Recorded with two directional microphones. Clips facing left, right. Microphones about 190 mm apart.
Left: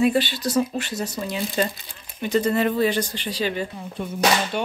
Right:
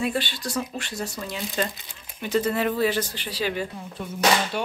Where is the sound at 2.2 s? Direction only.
5° right (ahead or behind).